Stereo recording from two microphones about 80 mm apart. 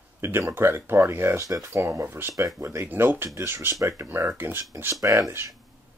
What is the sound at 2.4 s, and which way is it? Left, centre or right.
Speech, right.